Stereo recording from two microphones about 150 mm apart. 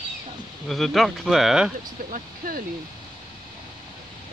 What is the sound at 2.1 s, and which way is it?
Speech, 75° right (ahead or behind).